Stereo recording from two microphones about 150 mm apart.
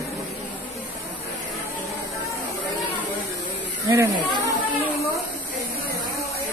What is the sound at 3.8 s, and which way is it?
Speech, 20° right (ahead or behind).